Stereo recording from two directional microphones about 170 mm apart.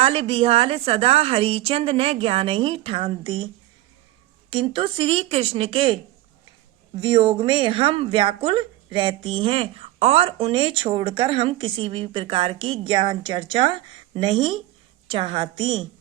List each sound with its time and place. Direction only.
0.0 s speech: 35° right (ahead or behind)
7.0 s speech: 30° right (ahead or behind)